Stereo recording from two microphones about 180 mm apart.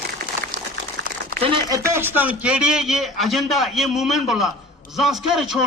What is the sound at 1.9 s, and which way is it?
A man's voice, 10° right (ahead or behind).